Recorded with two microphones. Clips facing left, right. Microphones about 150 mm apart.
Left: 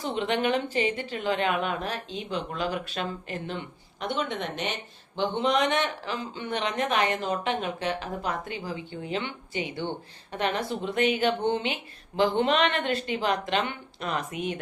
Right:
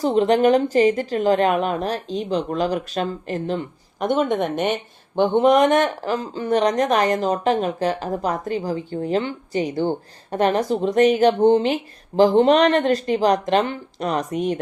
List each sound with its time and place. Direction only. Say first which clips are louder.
0.0 s speech: right 11 dB; 40° right (ahead or behind)